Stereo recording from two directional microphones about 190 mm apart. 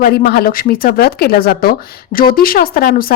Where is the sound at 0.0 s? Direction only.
55° left (ahead or behind).